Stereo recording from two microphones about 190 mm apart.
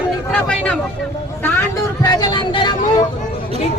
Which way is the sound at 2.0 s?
20° left (ahead or behind).